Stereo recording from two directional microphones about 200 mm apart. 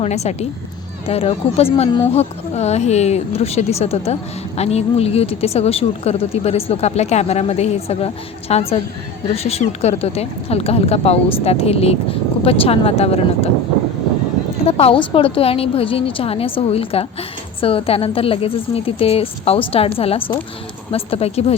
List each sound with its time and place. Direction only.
0.0 s speech: 35° left (ahead or behind)
14.7 s a woman's voice: 30° left (ahead or behind)